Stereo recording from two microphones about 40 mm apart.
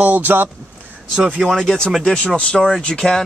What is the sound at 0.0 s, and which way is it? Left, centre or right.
Speech, right.